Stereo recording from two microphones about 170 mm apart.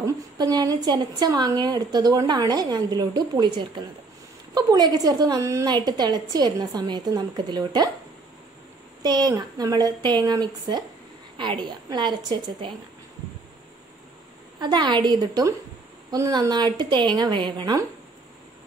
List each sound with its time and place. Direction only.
0.0 s a woman's voice: 25° right (ahead or behind)
9.0 s a woman's voice: 25° right (ahead or behind)
14.6 s a woman's voice: 25° right (ahead or behind)